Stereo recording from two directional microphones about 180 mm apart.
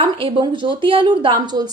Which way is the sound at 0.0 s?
30° right (ahead or behind).